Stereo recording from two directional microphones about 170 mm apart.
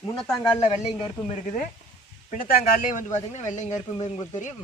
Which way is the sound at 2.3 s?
55° left (ahead or behind).